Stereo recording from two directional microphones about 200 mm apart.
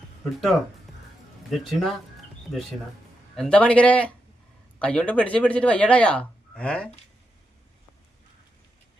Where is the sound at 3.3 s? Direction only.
5° left (ahead or behind).